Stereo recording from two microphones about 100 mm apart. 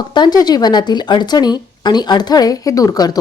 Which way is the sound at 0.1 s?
45° left (ahead or behind).